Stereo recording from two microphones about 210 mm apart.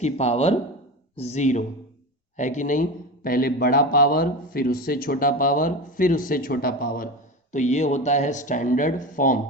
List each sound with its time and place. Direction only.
0.0 s speech: 30° left (ahead or behind)